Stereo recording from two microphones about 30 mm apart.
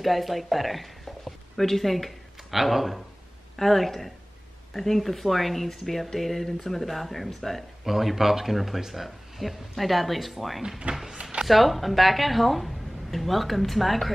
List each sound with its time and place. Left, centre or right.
0.0 s a woman's voice: centre
7.8 s a woman's voice: centre
10.9 s speech: right
11.4 s a woman's voice: centre